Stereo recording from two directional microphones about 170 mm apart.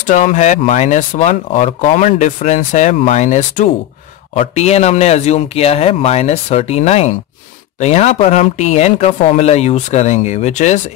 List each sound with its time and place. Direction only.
0.0 s speech: 50° left (ahead or behind)